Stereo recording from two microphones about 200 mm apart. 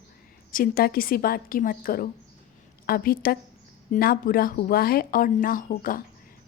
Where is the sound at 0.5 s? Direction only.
50° left (ahead or behind).